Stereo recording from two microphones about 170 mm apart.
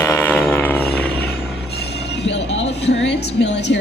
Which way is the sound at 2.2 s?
90° left.